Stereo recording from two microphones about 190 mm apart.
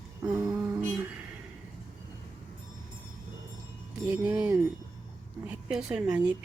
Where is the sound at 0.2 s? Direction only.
20° right (ahead or behind).